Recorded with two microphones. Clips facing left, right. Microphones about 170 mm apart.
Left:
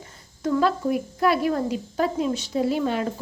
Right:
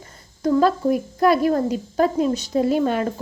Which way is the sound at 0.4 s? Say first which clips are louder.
Right 4 dB; 40° right (ahead or behind).